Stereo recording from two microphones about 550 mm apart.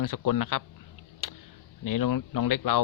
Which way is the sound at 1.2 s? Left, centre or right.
Left.